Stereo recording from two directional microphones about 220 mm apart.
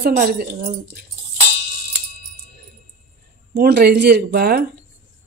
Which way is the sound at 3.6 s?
45° right (ahead or behind).